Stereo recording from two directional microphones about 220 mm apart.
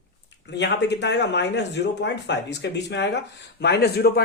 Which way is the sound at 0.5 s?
50° left (ahead or behind).